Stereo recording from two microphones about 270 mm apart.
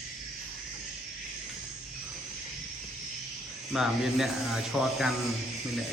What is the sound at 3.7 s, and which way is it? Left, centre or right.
Speech, centre.